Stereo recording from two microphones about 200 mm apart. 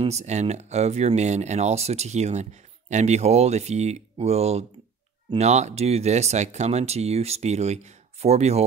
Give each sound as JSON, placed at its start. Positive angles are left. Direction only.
{"t": 0.0, "sound": "speech", "side_deg": -35}